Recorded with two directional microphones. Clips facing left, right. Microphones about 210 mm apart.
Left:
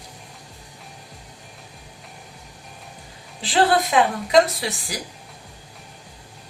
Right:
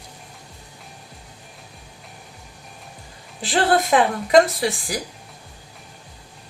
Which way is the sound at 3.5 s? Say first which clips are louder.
Even; 50° right (ahead or behind).